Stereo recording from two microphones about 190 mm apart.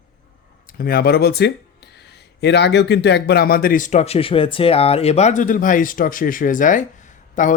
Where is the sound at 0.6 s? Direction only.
50° left (ahead or behind).